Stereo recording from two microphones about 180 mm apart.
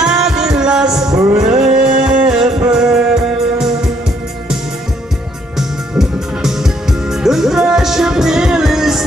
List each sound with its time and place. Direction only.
0.0 s music: 5° right (ahead or behind)
1.1 s music: 20° right (ahead or behind)
1.4 s music: 5° right (ahead or behind)
5.6 s music: centre (ahead or behind)